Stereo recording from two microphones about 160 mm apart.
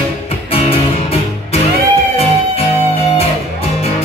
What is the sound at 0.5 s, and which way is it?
Music, 35° left (ahead or behind).